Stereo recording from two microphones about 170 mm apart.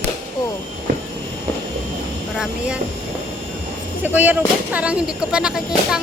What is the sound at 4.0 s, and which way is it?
A child's voice, 10° right (ahead or behind).